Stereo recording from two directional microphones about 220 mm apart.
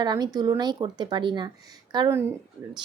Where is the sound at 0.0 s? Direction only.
20° right (ahead or behind).